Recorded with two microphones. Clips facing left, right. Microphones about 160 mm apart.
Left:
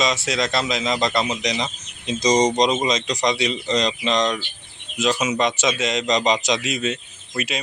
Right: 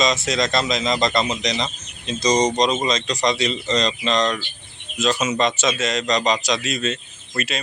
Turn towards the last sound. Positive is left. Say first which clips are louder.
# even
turn(degrees=15)  # may be behind; listen again after turning